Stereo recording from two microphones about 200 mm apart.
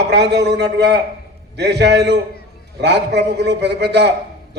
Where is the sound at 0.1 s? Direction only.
55° right (ahead or behind).